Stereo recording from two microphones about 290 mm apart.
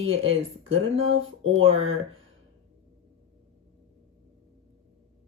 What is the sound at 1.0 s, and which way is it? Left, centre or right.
Speech, right.